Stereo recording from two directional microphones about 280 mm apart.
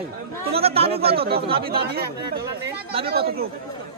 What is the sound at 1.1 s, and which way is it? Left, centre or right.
Speech, right.